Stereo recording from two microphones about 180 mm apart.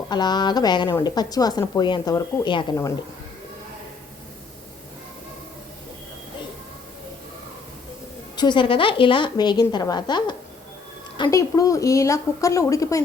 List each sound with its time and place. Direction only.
0.1 s speech: 25° left (ahead or behind)
8.4 s a woman's voice: 25° left (ahead or behind)